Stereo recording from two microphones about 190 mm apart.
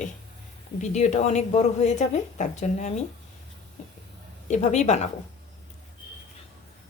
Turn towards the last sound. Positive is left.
turn(degrees=35)  # may be behind; listen again after turning